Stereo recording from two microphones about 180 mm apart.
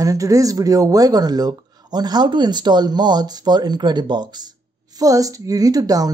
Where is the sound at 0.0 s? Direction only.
20° right (ahead or behind).